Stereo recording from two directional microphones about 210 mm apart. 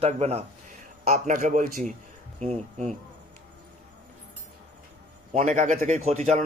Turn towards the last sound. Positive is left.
turn(degrees=-30)  # may be behind; listen again after turning